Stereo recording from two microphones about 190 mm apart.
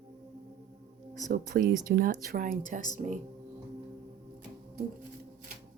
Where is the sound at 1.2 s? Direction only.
50° right (ahead or behind).